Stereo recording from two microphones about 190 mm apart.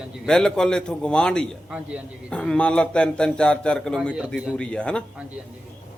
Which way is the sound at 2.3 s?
5° left (ahead or behind).